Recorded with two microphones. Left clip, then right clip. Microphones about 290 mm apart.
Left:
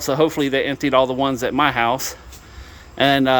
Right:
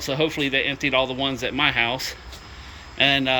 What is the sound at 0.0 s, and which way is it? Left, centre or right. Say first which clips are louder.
Speech: left 5 dB; centre.